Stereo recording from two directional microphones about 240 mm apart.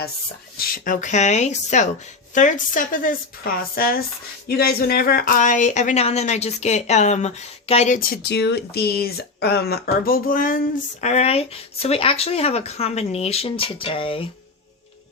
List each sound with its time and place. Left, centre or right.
0.5 s speech: left